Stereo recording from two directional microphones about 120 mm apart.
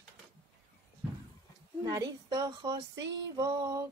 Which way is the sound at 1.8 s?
30° right (ahead or behind).